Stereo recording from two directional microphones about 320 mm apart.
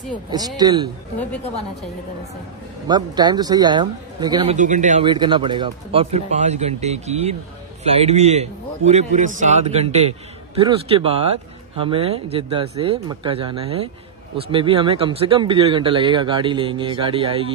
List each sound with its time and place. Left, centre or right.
0.6 s speech: centre
2.9 s speech: centre
4.6 s a man's voice: right